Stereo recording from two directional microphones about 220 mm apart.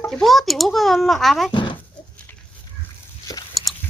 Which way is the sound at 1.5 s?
20° left (ahead or behind).